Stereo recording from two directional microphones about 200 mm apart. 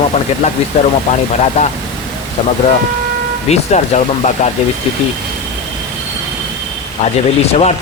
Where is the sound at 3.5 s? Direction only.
35° left (ahead or behind).